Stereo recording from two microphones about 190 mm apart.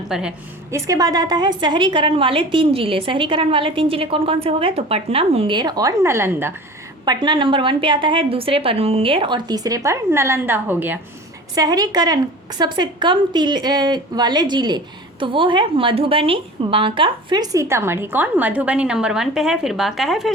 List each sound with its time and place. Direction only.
0.1 s a woman's voice: 5° right (ahead or behind)
0.7 s a woman's voice: 15° right (ahead or behind); by 20.3 s centre (ahead or behind)